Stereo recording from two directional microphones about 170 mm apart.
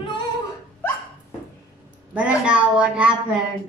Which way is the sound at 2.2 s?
5° right (ahead or behind).